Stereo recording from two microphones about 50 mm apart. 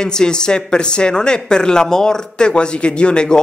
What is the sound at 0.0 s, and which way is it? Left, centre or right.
A man's voice, centre.